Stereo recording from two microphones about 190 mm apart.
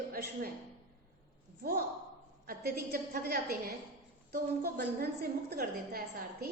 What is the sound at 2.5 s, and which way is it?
A woman's voice, 55° right (ahead or behind).